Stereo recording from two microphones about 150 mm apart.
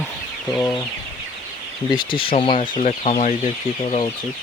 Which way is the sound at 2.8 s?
50° left (ahead or behind).